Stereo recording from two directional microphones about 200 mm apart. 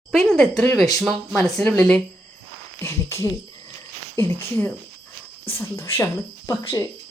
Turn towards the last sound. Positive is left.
turn(degrees=15)  # may be behind; listen again after turning